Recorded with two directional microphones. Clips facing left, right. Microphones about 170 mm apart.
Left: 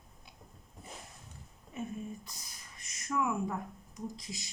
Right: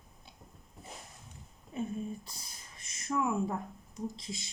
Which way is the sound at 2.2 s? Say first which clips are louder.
Right 1 dB; 30° right (ahead or behind).